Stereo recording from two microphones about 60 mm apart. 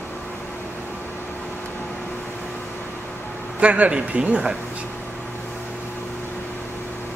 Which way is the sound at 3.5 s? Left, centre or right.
Right.